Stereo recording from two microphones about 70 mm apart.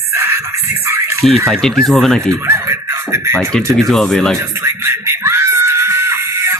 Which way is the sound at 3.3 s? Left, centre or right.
Centre.